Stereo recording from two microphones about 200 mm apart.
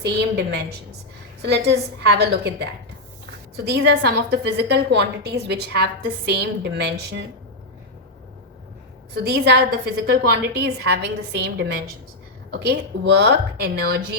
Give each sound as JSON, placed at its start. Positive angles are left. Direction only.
{"t": 0.0, "sound": "a woman's voice", "side_deg": -55}
{"t": 9.1, "sound": "a woman's voice", "side_deg": -55}